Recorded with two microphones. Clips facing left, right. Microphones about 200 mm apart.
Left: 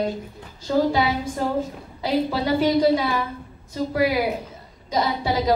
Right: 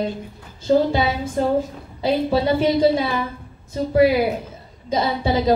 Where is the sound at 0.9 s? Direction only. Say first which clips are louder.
Right 2 dB; 25° right (ahead or behind).